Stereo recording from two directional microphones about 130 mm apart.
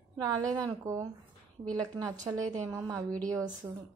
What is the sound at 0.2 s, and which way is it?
A woman's voice, 25° right (ahead or behind).